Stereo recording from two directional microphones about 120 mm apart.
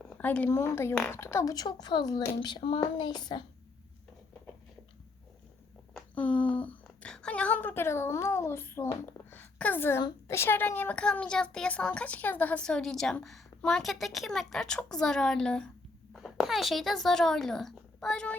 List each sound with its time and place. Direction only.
0.0 s a woman's voice: 10° left (ahead or behind); by 3.4 s 35° left (ahead or behind)
5.9 s a sound: 10° left (ahead or behind)
10.0 s a woman's voice: 35° left (ahead or behind)
10.3 s a woman's voice: 20° left (ahead or behind)